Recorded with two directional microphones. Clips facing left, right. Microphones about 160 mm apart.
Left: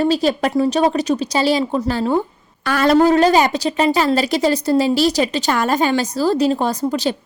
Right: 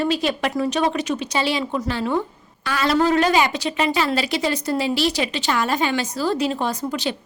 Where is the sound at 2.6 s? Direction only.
50° left (ahead or behind).